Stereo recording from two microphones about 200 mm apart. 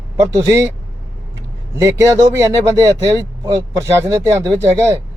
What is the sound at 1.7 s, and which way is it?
Speech, 15° right (ahead or behind).